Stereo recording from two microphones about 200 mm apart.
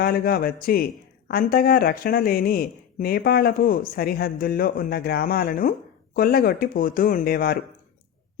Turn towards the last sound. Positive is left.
turn(degrees=50)  # may be behind; listen again after turning